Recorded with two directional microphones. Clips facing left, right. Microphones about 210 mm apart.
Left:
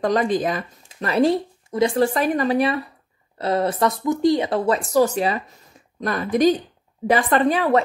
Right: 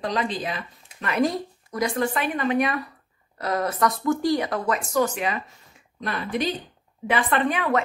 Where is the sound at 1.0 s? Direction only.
30° left (ahead or behind).